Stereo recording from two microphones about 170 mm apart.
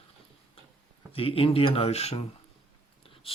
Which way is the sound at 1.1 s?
35° left (ahead or behind).